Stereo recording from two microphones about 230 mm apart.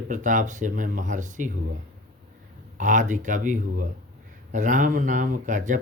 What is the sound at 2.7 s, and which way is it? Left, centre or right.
Speech, right.